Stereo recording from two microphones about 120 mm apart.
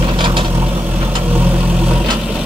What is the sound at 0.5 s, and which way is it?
Vehicle, 20° right (ahead or behind).